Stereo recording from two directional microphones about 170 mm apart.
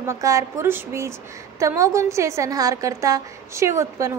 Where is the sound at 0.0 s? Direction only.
20° right (ahead or behind).